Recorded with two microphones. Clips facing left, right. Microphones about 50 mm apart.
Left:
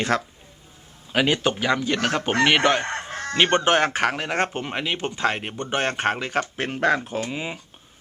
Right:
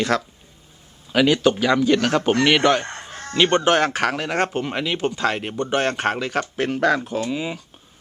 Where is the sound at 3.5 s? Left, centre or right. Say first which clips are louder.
Right 2 dB; centre.